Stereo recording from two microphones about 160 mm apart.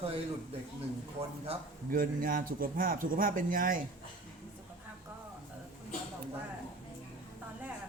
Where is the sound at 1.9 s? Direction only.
60° right (ahead or behind).